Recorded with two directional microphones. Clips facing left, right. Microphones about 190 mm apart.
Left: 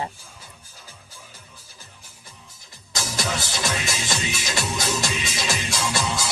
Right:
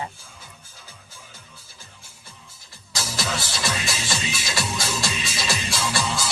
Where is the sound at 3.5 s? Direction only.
20° left (ahead or behind).